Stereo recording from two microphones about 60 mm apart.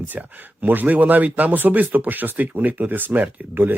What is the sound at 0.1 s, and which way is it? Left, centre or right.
Speech, right.